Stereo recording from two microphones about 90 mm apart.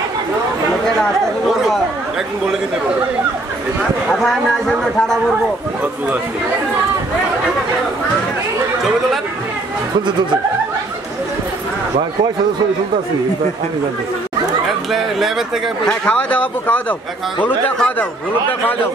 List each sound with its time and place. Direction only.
1.5 s chatter: 5° right (ahead or behind)
4.1 s speech: 5° left (ahead or behind)
14.7 s speech: centre (ahead or behind)
15.9 s speech: 15° left (ahead or behind)